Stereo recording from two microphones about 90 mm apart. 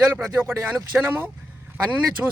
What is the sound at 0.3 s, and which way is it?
A man's voice, 30° right (ahead or behind).